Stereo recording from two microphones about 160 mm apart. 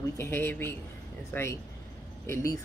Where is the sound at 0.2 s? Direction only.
10° left (ahead or behind).